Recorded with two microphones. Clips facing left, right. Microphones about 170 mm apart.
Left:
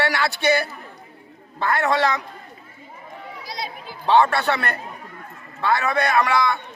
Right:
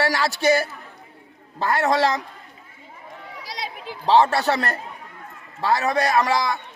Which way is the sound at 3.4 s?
85° right.